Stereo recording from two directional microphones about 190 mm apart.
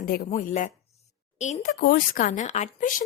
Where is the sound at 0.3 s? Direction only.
40° left (ahead or behind).